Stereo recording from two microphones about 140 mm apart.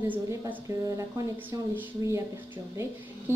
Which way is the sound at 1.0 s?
25° right (ahead or behind).